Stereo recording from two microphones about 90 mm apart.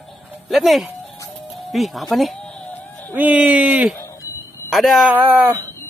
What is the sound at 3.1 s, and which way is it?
Speech, 15° right (ahead or behind).